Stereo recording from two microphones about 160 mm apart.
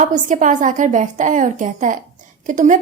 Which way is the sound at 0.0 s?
50° right (ahead or behind).